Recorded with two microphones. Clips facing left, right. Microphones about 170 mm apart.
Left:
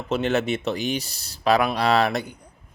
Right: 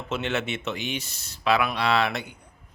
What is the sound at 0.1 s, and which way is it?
Speech, 40° left (ahead or behind).